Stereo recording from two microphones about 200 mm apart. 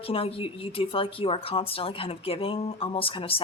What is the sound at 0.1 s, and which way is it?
Speech, 30° left (ahead or behind).